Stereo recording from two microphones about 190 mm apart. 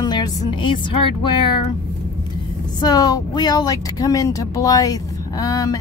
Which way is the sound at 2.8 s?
20° left (ahead or behind).